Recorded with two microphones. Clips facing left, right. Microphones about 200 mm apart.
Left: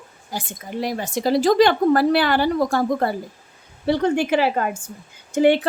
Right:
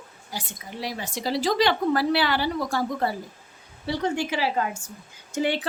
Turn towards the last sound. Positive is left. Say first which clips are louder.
# left 9 dB
turn(degrees=55)  # may be behind; listen again after turning